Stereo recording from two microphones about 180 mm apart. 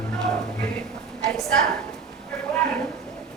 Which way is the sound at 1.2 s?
Centre (ahead or behind).